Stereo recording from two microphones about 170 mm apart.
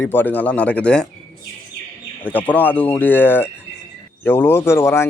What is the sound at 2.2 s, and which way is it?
A man's voice, 10° left (ahead or behind).